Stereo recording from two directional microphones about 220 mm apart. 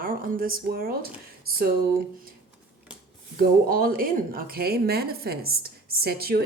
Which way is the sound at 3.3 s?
40° right (ahead or behind).